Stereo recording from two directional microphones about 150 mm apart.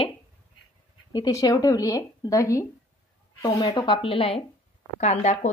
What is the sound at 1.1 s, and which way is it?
A woman's voice, 25° left (ahead or behind).